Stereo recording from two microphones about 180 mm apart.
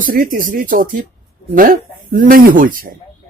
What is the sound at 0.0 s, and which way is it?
Speech, 50° right (ahead or behind).